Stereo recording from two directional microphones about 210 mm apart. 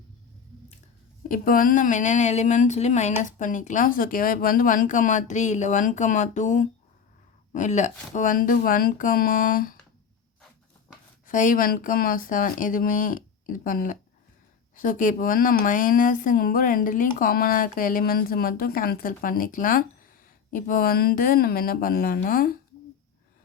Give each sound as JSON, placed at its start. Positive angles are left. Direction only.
{"t": 1.3, "sound": "speech", "side_deg": 40}
{"t": 11.3, "sound": "a woman's voice", "side_deg": 40}